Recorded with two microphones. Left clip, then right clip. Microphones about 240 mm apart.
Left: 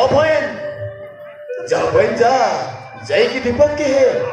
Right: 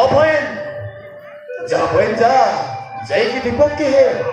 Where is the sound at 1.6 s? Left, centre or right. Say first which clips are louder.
Even; left.